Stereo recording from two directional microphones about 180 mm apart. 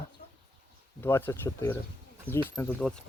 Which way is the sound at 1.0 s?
10° left (ahead or behind).